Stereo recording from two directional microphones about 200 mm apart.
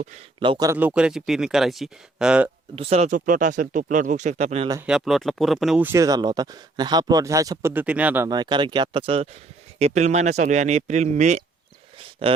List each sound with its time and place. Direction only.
0.3 s speech: 25° right (ahead or behind); by 2.5 s 5° right (ahead or behind)
2.7 s speech: 30° right (ahead or behind)
4.9 s speech: centre (ahead or behind); by 12.4 s 25° right (ahead or behind)